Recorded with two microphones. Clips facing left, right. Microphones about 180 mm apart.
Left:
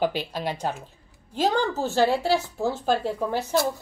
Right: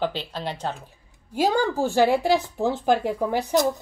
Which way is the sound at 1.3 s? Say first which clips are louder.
Right 2 dB; 10° right (ahead or behind).